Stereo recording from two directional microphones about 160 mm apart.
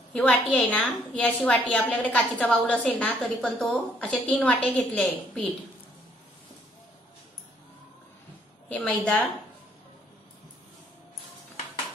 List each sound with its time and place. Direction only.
0.1 s a woman's voice: 10° left (ahead or behind)
8.6 s a woman's voice: 10° left (ahead or behind)